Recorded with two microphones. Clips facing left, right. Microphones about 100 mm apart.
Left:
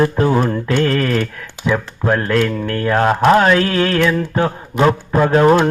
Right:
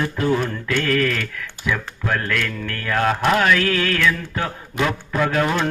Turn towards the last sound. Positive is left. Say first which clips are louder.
# left 8 dB
turn(degrees=35)  # may be behind; listen again after turning